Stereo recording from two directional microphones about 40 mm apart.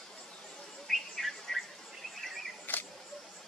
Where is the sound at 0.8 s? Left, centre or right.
Centre.